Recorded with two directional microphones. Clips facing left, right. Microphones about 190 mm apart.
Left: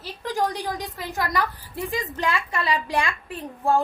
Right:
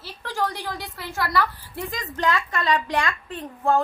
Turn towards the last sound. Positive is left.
turn(degrees=10)  # may be behind; listen again after turning